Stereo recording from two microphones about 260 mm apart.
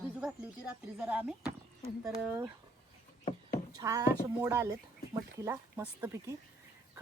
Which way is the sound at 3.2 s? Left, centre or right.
Left.